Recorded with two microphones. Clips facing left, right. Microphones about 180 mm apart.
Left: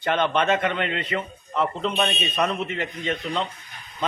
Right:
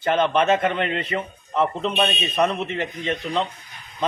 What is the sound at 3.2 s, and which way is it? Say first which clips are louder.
Speech: right 5 dB; 5° right (ahead or behind).